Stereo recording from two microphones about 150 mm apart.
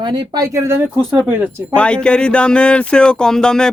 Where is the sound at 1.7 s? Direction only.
5° left (ahead or behind).